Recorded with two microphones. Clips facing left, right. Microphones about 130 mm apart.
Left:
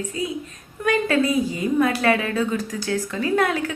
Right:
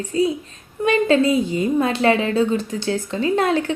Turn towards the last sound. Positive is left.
turn(degrees=-25)  # may be behind; listen again after turning